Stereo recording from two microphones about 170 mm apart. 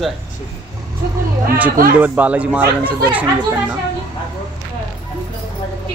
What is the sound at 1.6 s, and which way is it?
Speech, 55° right (ahead or behind).